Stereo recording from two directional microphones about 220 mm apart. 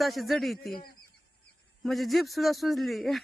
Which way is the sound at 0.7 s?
45° left (ahead or behind).